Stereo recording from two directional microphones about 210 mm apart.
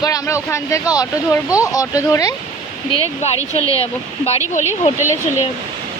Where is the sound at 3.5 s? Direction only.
25° left (ahead or behind).